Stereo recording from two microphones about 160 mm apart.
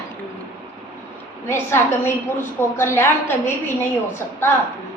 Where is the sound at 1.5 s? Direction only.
15° left (ahead or behind).